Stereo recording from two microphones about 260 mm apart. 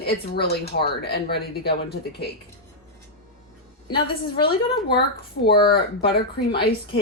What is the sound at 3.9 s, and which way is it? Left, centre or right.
Speech, centre.